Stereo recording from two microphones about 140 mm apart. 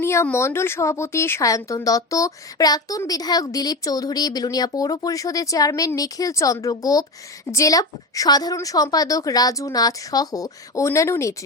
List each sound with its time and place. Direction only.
0.0 s speech: 20° left (ahead or behind)